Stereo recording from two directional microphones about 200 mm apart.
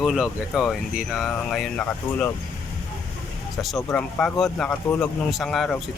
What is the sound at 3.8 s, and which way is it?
Speech, 15° left (ahead or behind).